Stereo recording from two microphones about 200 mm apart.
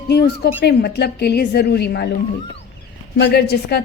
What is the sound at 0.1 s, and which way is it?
A woman's voice, 55° left (ahead or behind).